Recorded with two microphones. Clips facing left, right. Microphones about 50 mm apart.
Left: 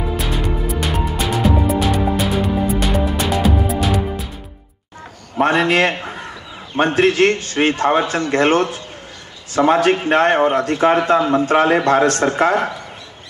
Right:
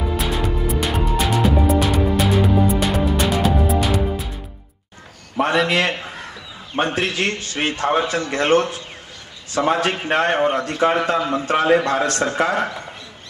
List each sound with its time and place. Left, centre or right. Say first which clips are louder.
0.2 s music: even; centre
5.4 s a man's voice: left 3 dB; left